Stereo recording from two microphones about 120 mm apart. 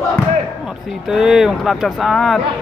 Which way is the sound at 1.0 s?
5° right (ahead or behind).